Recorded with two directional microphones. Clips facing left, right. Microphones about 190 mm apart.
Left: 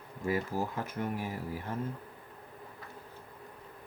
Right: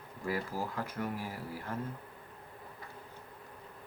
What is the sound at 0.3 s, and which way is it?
Speech, 20° left (ahead or behind).